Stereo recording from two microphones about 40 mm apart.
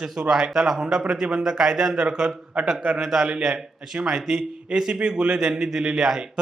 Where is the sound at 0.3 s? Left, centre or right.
Right.